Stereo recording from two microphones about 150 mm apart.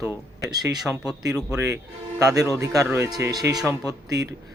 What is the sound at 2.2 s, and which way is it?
Speech, 20° right (ahead or behind).